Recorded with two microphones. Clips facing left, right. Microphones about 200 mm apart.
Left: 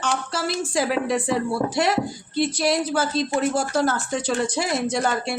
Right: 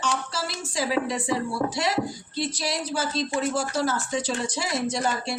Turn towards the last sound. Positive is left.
turn(degrees=55)  # may be behind; listen again after turning